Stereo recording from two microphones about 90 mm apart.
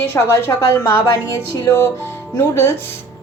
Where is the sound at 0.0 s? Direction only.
30° left (ahead or behind).